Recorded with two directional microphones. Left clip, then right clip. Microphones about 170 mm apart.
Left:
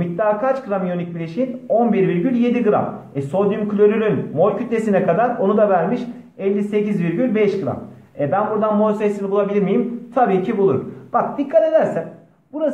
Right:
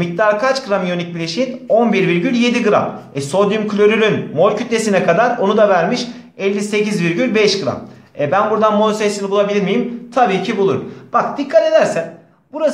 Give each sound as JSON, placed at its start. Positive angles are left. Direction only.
{"t": 0.0, "sound": "a man's voice", "side_deg": -30}
{"t": 9.0, "sound": "a man's voice", "side_deg": -15}